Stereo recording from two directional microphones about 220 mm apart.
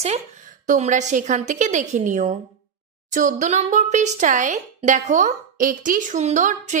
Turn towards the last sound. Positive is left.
turn(degrees=-35)  # may be behind; listen again after turning